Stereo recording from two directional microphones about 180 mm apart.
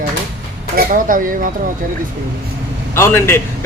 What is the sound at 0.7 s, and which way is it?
Speech, 50° right (ahead or behind).